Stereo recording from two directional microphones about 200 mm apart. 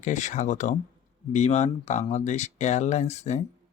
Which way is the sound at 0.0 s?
35° left (ahead or behind).